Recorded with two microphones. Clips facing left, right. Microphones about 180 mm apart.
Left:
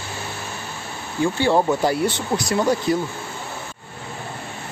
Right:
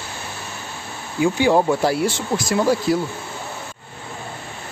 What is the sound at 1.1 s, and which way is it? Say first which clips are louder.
Speech: right 2 dB; 10° right (ahead or behind).